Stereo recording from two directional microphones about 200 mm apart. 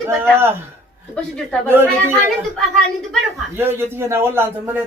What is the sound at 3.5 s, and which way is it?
Speech, 10° right (ahead or behind).